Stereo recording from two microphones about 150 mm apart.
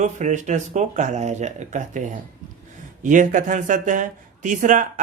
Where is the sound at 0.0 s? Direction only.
50° right (ahead or behind).